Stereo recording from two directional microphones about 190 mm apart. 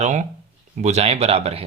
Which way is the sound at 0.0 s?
40° right (ahead or behind).